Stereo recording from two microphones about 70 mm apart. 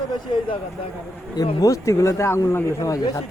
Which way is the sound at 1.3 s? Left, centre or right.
Left.